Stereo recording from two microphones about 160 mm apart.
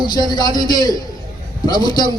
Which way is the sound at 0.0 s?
25° left (ahead or behind).